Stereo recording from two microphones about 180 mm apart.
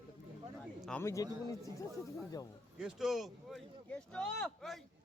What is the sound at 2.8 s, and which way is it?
Speech, centre (ahead or behind).